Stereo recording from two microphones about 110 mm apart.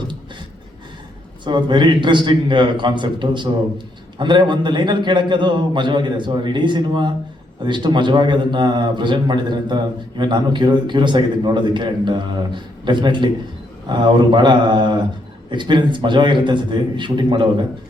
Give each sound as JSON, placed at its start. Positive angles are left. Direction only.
{"t": 1.5, "sound": "a man's voice", "side_deg": -45}